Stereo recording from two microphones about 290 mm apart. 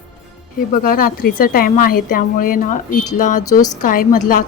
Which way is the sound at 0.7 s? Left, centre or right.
Left.